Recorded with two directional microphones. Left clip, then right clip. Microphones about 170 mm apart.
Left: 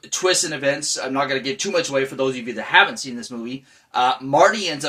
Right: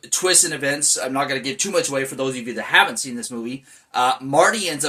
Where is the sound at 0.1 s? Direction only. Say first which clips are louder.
Right 1 dB; 15° right (ahead or behind).